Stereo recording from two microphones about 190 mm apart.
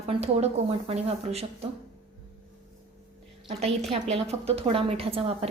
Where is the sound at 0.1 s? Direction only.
30° right (ahead or behind).